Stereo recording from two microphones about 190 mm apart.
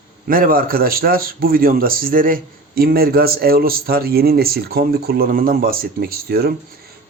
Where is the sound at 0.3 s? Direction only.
50° right (ahead or behind).